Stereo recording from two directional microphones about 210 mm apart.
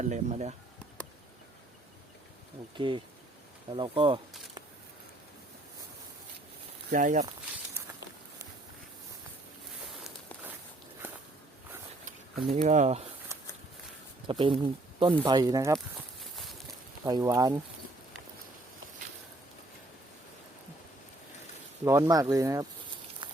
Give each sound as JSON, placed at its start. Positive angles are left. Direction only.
{"t": 0.0, "sound": "speech", "side_deg": -35}
{"t": 2.7, "sound": "speech", "side_deg": -25}
{"t": 6.9, "sound": "speech", "side_deg": -40}
{"t": 12.6, "sound": "speech", "side_deg": -35}
{"t": 14.3, "sound": "speech", "side_deg": -25}
{"t": 17.1, "sound": "speech", "side_deg": -15}
{"t": 21.8, "sound": "speech", "side_deg": -15}
{"t": 23.2, "sound": "a sound", "side_deg": -20}